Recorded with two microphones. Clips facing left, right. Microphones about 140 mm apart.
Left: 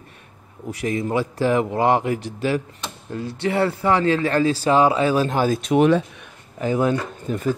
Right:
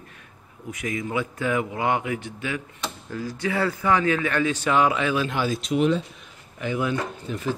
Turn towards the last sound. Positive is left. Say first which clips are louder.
# left 5 dB
turn(degrees=45)  # may be behind; listen again after turning